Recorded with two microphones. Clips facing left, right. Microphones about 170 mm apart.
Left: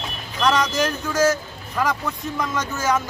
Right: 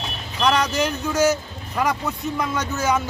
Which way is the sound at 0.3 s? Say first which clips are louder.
Even; 5° right (ahead or behind).